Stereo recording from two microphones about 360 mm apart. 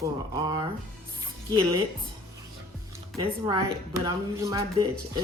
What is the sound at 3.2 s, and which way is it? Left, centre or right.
A woman's voice, centre.